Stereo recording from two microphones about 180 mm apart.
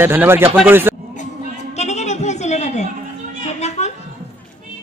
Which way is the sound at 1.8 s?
40° left (ahead or behind).